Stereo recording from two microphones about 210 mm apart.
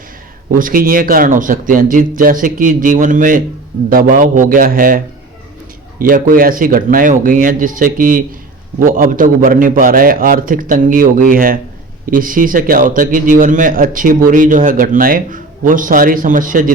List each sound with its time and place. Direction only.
0.6 s a man's voice: 40° right (ahead or behind)
6.0 s a man's voice: 40° right (ahead or behind)